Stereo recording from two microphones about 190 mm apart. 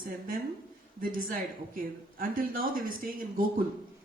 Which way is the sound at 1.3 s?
45° right (ahead or behind).